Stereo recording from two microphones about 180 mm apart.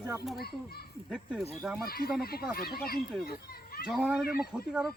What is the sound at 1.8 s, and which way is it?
A child's voice, 60° left (ahead or behind).